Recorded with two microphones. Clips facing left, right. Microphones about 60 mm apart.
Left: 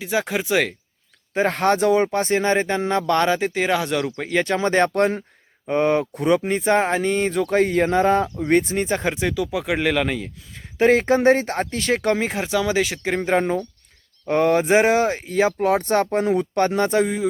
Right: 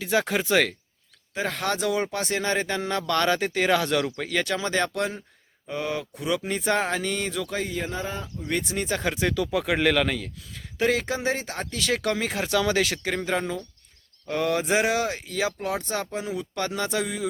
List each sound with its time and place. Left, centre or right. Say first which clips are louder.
0.0 s speech: left 1 dB; centre
1.3 s speech: left 8 dB; left
7.5 s speech: left 12 dB; left
8.5 s speech: left 7 dB; left
9.2 s speech: left 2 dB; centre
10.8 s speech: left 8 dB; left